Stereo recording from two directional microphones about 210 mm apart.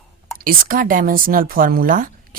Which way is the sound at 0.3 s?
40° right (ahead or behind).